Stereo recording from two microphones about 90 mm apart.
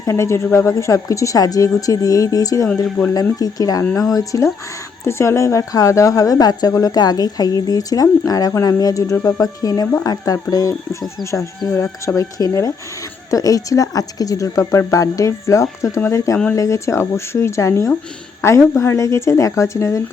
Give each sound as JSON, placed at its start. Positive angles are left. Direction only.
{"t": 0.0, "sound": "a woman's voice", "side_deg": 35}